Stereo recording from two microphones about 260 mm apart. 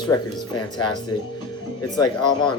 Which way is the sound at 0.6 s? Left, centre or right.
Centre.